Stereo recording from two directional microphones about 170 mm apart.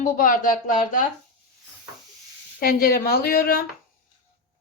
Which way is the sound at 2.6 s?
60° left (ahead or behind).